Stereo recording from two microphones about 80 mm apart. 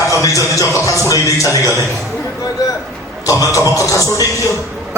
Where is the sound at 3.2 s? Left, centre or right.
Left.